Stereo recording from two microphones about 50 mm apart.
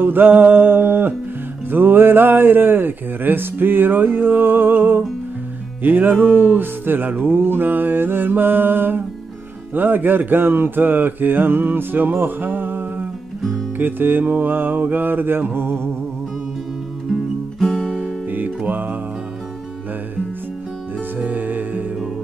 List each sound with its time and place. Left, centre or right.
0.0 s speech: right
5.8 s music: right
6.5 s speech: right
9.8 s mantra: right
15.5 s speech: right
17.1 s music: centre
21.2 s music: right